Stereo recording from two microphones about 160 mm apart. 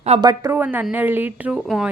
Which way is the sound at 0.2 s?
25° right (ahead or behind).